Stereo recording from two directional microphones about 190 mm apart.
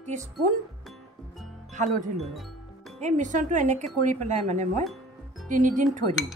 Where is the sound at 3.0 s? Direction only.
40° right (ahead or behind).